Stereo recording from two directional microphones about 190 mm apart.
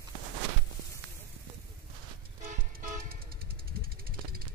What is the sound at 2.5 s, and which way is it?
Vehicle, 45° right (ahead or behind).